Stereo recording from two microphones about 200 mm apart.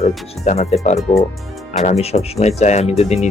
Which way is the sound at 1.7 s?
35° left (ahead or behind).